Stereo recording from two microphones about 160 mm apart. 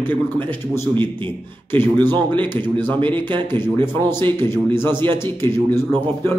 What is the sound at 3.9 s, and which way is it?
Speech, 15° left (ahead or behind).